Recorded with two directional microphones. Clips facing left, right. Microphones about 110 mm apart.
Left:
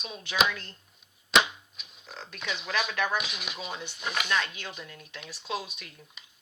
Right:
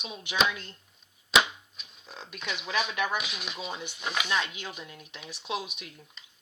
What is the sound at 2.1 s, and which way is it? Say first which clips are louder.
Speech: left 1 dB; 15° right (ahead or behind).